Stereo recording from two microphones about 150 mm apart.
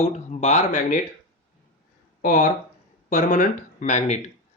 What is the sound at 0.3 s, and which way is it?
Speech, 50° left (ahead or behind).